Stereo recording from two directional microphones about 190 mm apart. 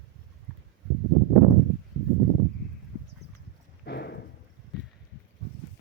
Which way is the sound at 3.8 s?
60° left (ahead or behind).